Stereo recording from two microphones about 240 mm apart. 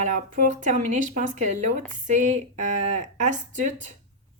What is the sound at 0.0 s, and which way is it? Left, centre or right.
Speech, right.